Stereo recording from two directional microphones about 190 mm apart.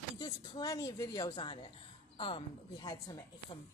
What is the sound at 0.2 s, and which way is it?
A woman's voice, 20° left (ahead or behind).